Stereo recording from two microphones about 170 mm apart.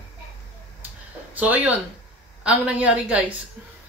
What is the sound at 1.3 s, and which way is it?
Speech, 10° right (ahead or behind).